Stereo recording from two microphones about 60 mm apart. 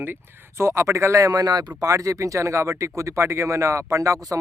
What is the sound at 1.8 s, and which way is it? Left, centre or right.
Speech, right.